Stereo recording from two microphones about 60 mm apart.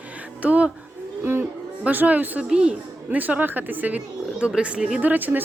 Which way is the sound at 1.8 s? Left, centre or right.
Right.